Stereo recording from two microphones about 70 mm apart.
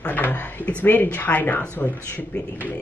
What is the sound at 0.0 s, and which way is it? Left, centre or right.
Drawer open or close, left.